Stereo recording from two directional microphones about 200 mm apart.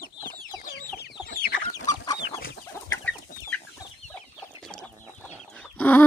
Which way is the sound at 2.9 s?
10° left (ahead or behind).